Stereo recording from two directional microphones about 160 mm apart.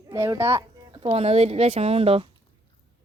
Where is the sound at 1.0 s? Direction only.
40° right (ahead or behind).